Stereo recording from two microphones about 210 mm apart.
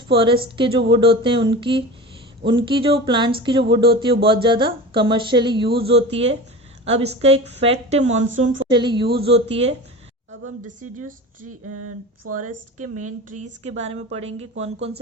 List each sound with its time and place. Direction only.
0.1 s a woman's voice: 25° right (ahead or behind)
8.7 s speech: 20° right (ahead or behind)
12.3 s a woman's voice: 35° right (ahead or behind)
13.0 s a woman's voice: 90° right
13.4 s speech: 30° right (ahead or behind)